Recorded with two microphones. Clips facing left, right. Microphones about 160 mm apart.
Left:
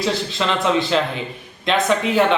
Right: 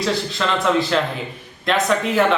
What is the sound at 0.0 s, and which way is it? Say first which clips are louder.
Speech: even; centre (ahead or behind).